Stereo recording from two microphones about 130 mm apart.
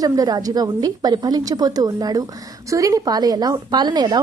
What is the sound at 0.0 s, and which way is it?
A woman's voice, 30° right (ahead or behind).